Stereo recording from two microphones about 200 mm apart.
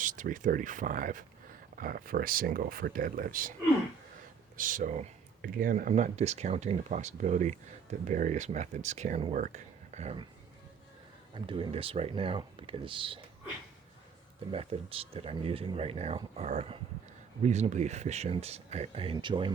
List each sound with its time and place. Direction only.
0.0 s speech: 40° right (ahead or behind)
4.5 s speech: 40° right (ahead or behind)
11.3 s speech: 25° right (ahead or behind)
14.5 s speech: 30° right (ahead or behind)